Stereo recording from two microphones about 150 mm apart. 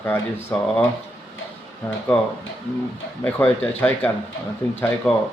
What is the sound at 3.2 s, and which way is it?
Speech, 5° left (ahead or behind).